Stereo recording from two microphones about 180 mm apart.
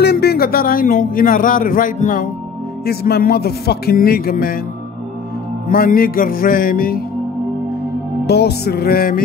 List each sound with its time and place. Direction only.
0.0 s a man's voice: 60° left (ahead or behind)
2.8 s music: 60° left (ahead or behind)
5.7 s music: 55° left (ahead or behind)
8.3 s music: 65° left (ahead or behind)